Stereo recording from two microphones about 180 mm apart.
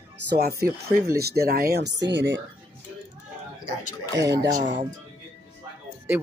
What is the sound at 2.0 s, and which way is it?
Speech, 80° right.